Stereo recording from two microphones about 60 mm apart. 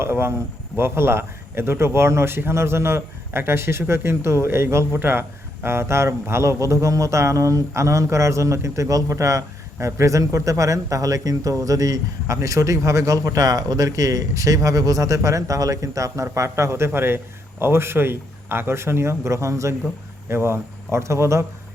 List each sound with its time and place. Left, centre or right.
0.0 s a man's voice: right
4.9 s a man's voice: right
5.6 s a man's voice: right
16.2 s a man's voice: right